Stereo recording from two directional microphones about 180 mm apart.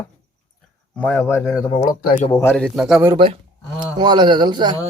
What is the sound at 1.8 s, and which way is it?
Speech, 45° left (ahead or behind).